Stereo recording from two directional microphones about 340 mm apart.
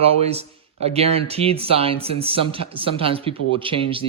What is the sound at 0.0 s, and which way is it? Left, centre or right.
A man's voice, centre.